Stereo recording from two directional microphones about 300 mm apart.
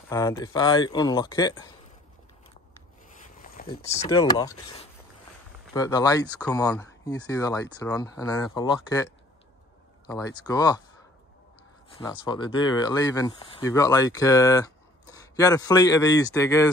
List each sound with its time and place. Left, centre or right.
0.1 s speech: centre
3.1 s rub: left
4.1 s speech: centre
12.0 s speech: centre